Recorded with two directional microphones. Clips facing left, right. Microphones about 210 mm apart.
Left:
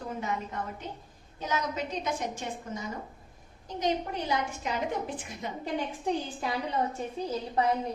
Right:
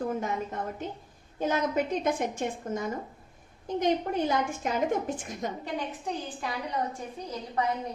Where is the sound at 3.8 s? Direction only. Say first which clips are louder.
Right 4 dB; 50° right (ahead or behind).